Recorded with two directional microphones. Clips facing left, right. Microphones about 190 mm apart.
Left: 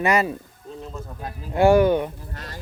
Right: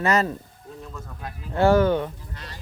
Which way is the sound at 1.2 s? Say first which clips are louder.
Left 3 dB; 35° left (ahead or behind).